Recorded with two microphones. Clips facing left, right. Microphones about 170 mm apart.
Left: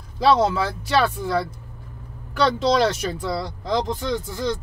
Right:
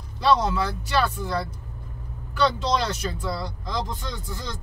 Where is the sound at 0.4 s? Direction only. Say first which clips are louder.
Left 5 dB; 90° left.